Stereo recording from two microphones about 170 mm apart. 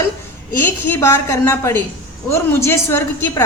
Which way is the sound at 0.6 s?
15° left (ahead or behind).